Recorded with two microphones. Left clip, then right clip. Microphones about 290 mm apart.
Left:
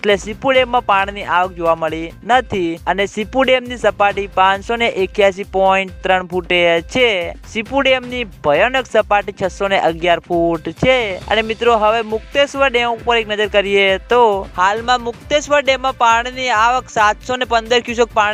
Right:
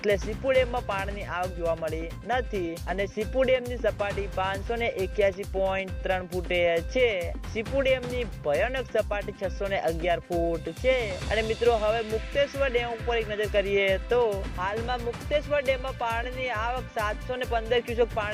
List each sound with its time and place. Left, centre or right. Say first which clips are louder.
0.0 s speech: left 11 dB; left